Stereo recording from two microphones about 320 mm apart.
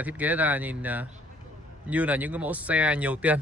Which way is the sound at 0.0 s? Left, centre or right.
Centre.